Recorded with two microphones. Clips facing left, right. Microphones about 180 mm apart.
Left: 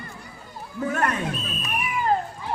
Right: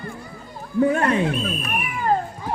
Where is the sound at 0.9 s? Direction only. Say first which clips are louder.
Right 5 dB; 25° right (ahead or behind).